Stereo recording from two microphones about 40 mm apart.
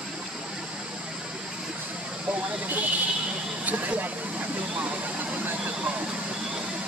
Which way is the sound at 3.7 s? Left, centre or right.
Right.